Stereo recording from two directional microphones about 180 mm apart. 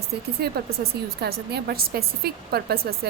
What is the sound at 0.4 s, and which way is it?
Speech, 60° right (ahead or behind).